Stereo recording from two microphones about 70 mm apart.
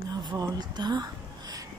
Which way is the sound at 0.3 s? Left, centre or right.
Right.